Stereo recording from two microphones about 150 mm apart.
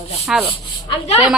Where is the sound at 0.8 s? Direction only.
45° left (ahead or behind).